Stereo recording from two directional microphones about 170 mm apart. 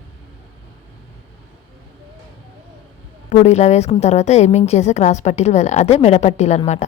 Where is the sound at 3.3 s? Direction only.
40° left (ahead or behind).